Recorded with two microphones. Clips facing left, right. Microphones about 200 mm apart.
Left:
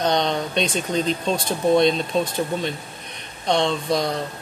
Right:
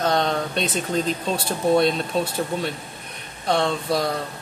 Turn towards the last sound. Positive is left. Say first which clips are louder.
# left 1 dB
turn(degrees=-5)  # may be behind; listen again after turning